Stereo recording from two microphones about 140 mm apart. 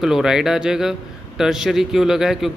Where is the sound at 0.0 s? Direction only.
5° right (ahead or behind).